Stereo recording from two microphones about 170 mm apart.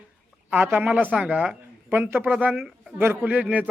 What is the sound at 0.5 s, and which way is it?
A man's voice, 10° right (ahead or behind).